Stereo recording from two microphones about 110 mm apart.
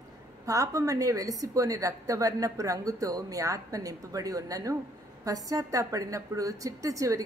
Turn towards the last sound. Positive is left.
turn(degrees=-30)  # may be behind; listen again after turning